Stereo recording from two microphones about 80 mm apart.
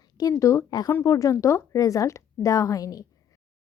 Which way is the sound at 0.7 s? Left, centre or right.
Left.